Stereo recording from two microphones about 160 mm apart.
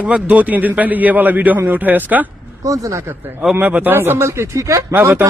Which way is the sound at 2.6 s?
20° right (ahead or behind).